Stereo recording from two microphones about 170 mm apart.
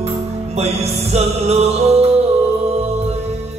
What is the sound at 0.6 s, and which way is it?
Music, 40° right (ahead or behind).